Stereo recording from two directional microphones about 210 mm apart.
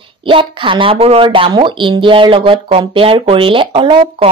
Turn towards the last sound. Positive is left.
turn(degrees=-25)  # may be behind; listen again after turning